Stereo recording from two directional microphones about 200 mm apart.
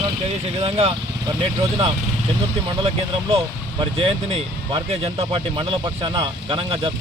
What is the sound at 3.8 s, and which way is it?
Speech, 30° right (ahead or behind).